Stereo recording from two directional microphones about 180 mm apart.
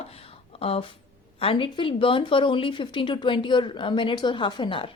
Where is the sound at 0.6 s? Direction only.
30° left (ahead or behind).